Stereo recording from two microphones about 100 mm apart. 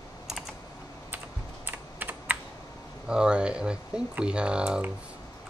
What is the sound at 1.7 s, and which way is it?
Computer keyboard, 15° right (ahead or behind).